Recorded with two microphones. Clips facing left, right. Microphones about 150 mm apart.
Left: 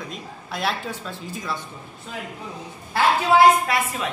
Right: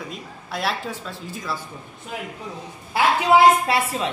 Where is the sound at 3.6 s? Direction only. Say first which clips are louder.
Right 2 dB; 30° right (ahead or behind).